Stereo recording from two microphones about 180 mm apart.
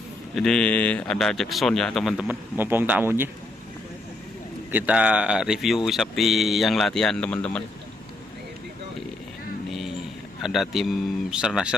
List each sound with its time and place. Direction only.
0.3 s speech: 5° left (ahead or behind)
4.7 s speech: 10° right (ahead or behind)
10.4 s speech: centre (ahead or behind)